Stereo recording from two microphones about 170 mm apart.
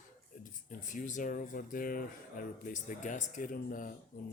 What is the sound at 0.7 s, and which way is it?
Speech, 50° left (ahead or behind).